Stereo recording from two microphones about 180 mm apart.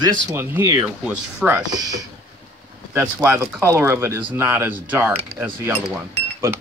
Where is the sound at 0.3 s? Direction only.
15° right (ahead or behind).